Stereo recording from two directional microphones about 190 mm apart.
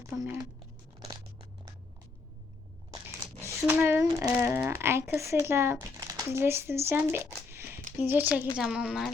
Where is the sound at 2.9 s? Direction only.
15° right (ahead or behind).